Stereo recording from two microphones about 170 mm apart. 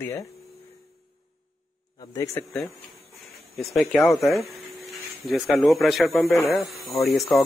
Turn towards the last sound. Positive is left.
turn(degrees=0)  # may be behind; listen again after turning